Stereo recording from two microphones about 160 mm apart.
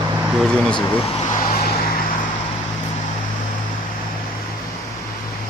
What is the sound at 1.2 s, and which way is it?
Vehicle, 55° left (ahead or behind).